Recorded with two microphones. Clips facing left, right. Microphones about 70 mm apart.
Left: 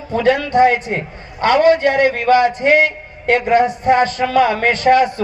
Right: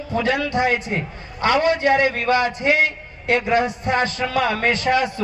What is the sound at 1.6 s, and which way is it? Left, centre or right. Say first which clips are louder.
A man's voice: left 6 dB; left.